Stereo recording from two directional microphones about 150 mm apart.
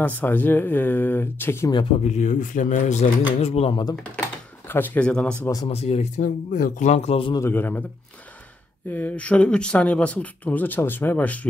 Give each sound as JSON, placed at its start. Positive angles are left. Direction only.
{"t": 0.0, "sound": "speech", "side_deg": 10}
{"t": 2.0, "sound": "speech", "side_deg": 55}
{"t": 3.4, "sound": "speech", "side_deg": 40}
{"t": 4.6, "sound": "speech", "side_deg": 15}
{"t": 5.7, "sound": "speech", "side_deg": 45}
{"t": 7.3, "sound": "speech", "side_deg": 15}
{"t": 8.8, "sound": "speech", "side_deg": 10}